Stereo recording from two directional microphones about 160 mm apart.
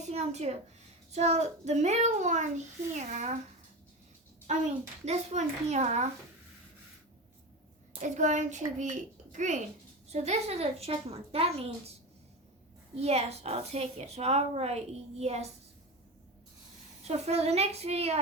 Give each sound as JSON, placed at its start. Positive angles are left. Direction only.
{"t": 0.0, "sound": "a woman's voice", "side_deg": -45}
{"t": 4.5, "sound": "a child's voice", "side_deg": -45}
{"t": 8.0, "sound": "a child's voice", "side_deg": -50}
{"t": 13.0, "sound": "a woman's voice", "side_deg": -40}
{"t": 17.0, "sound": "a woman's voice", "side_deg": -40}